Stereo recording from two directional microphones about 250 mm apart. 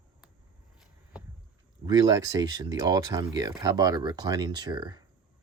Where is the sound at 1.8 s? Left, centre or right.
Centre.